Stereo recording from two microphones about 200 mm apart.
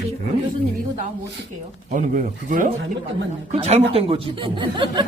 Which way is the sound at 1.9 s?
40° right (ahead or behind).